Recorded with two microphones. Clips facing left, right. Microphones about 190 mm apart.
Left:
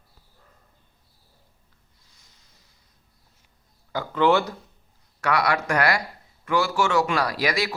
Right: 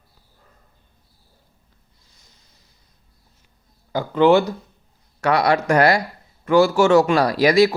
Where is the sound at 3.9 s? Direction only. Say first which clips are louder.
Right 6 dB; 15° right (ahead or behind).